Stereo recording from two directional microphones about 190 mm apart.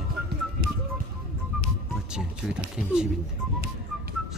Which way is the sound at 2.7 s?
5° right (ahead or behind).